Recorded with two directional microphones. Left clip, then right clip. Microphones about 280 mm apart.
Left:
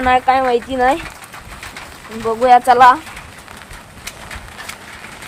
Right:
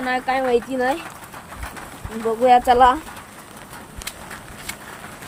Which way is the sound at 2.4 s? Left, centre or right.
Left.